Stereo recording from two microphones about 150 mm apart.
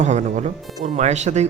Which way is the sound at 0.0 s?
55° right (ahead or behind).